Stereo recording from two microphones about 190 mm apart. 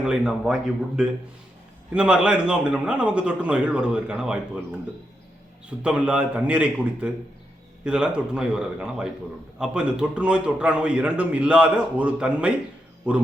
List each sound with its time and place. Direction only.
0.0 s a man's voice: 5° right (ahead or behind)
5.8 s a man's voice: 5° right (ahead or behind)